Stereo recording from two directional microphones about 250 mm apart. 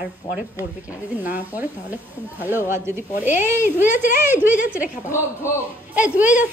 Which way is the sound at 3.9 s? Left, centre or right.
Left.